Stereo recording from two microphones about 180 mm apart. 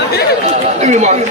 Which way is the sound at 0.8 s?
40° right (ahead or behind).